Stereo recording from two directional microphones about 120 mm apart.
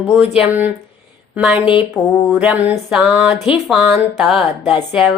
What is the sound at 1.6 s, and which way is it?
Speech, 45° left (ahead or behind).